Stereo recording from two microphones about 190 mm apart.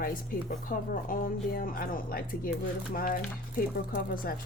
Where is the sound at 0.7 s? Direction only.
45° left (ahead or behind).